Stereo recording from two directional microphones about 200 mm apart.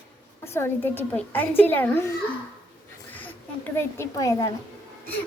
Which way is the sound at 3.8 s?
15° left (ahead or behind).